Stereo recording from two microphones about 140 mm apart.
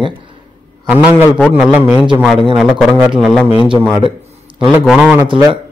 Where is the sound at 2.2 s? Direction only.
Centre (ahead or behind).